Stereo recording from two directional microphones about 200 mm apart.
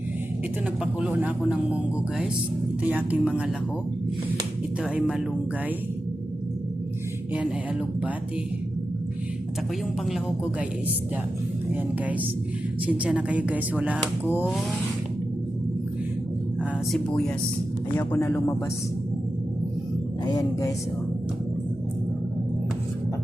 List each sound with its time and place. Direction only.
0.9 s speech: 5° right (ahead or behind)
4.8 s speech: 5° right (ahead or behind)
7.3 s speech: 5° right (ahead or behind)
11.7 s speech: 10° right (ahead or behind)
17.9 s speech: 10° left (ahead or behind)
20.2 s speech: 20° left (ahead or behind)